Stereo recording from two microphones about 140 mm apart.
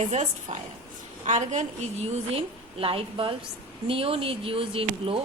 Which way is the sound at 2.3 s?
40° right (ahead or behind).